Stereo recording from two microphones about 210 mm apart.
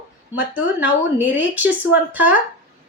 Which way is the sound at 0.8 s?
10° right (ahead or behind).